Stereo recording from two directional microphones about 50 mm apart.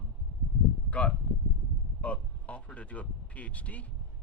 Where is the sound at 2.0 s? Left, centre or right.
Left.